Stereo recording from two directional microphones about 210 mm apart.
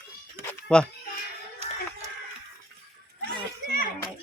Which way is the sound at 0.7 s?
5° left (ahead or behind).